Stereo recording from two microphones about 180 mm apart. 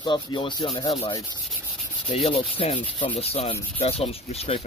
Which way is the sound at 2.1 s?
30° left (ahead or behind).